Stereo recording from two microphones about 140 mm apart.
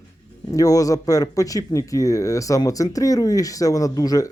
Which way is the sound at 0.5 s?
25° left (ahead or behind).